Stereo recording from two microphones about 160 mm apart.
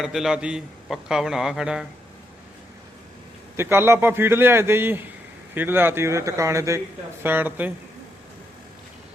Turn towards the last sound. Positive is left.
turn(degrees=-10)  # may be behind; listen again after turning